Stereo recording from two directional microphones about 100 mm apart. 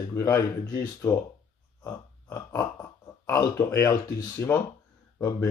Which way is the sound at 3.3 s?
30° left (ahead or behind).